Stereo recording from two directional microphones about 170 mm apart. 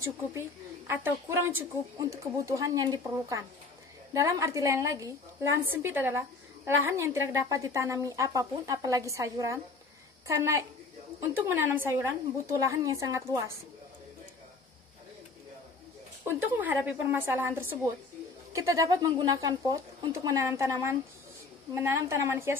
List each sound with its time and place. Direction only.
0.3 s a woman's voice: 15° right (ahead or behind)
16.3 s a woman's voice: 10° right (ahead or behind)